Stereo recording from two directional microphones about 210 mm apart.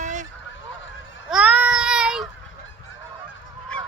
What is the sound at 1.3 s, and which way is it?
Child singing, 5° right (ahead or behind).